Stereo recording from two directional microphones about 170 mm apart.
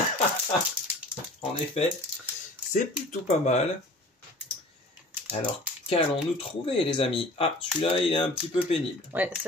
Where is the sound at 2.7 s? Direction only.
45° left (ahead or behind).